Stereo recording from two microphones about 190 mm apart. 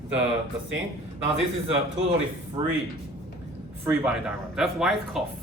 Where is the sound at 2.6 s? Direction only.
20° right (ahead or behind).